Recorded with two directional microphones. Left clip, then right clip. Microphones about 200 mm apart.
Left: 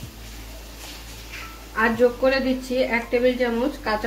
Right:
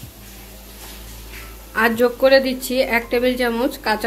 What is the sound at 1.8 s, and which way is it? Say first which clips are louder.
Speech: right 3 dB; 55° right (ahead or behind).